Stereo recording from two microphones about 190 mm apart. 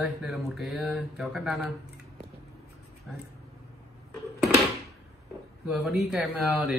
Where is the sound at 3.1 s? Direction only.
Centre (ahead or behind).